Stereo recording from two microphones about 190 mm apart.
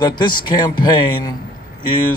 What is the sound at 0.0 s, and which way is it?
A man's voice, 25° left (ahead or behind).